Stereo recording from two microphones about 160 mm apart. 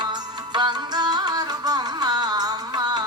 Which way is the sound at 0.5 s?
25° right (ahead or behind).